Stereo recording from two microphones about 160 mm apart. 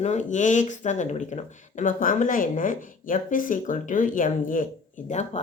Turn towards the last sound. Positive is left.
turn(degrees=45)  # may be behind; listen again after turning